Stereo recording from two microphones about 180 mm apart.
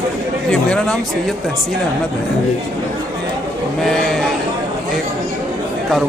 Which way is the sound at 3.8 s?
Centre (ahead or behind).